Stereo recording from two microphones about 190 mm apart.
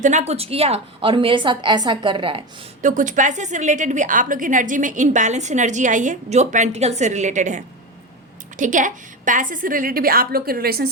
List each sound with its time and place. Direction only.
0.0 s a woman's voice: 40° right (ahead or behind)
2.8 s a woman's voice: 40° right (ahead or behind)